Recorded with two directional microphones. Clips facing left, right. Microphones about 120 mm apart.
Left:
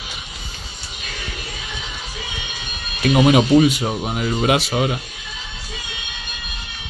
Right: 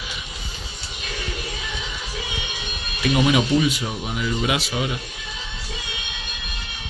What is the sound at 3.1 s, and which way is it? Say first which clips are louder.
Speech: left 5 dB; 40° left (ahead or behind).